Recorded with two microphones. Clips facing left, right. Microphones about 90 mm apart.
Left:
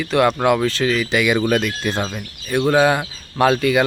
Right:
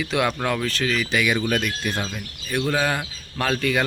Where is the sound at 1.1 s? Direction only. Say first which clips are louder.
Left 5 dB; 90° left.